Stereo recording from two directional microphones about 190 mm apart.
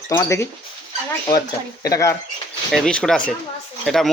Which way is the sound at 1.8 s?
15° left (ahead or behind).